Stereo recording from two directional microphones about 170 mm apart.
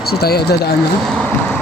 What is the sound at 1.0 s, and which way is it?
Speech, 5° left (ahead or behind).